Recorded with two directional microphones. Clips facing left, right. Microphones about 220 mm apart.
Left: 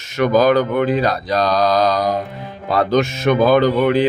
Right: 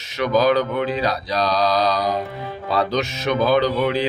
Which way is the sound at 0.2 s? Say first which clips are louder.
Left 4 dB; 50° left (ahead or behind).